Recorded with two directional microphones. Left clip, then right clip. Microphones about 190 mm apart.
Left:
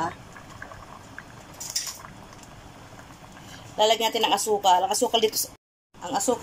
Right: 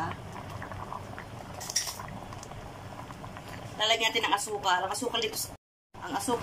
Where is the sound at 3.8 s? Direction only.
30° left (ahead or behind).